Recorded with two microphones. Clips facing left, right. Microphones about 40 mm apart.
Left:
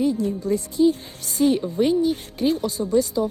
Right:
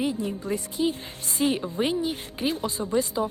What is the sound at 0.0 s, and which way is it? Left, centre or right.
A woman's voice, right.